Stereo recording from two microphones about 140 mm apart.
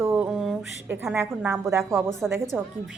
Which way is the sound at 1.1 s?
15° right (ahead or behind).